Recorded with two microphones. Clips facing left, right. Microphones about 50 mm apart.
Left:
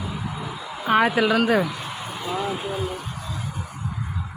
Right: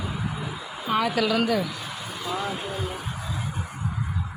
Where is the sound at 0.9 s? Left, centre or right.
Left.